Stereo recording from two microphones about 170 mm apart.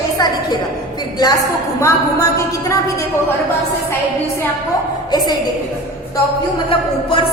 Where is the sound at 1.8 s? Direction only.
15° left (ahead or behind).